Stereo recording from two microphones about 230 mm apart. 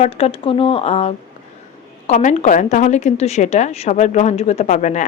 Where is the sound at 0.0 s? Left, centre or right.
Left.